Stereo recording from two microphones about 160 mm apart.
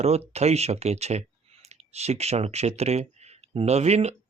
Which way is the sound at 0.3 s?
40° right (ahead or behind).